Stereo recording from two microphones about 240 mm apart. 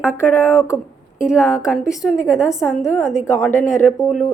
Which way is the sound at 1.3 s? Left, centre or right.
Centre.